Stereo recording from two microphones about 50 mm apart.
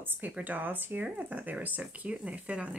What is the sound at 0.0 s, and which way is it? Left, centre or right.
Speech, right.